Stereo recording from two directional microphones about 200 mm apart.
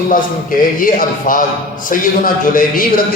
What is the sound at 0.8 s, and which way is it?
A man's voice, 45° left (ahead or behind).